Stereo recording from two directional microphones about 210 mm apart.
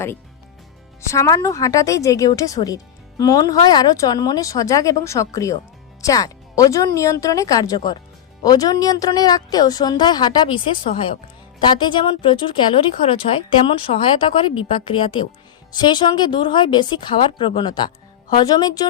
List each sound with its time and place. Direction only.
1.1 s speech: 15° left (ahead or behind)